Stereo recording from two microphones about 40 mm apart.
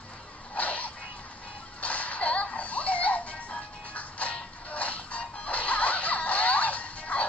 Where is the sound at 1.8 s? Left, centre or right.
Left.